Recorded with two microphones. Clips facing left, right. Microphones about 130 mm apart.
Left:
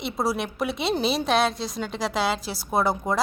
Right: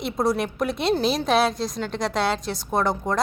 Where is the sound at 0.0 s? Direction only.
Centre (ahead or behind).